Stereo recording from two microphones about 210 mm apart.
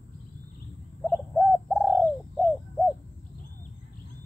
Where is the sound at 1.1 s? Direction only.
5° left (ahead or behind).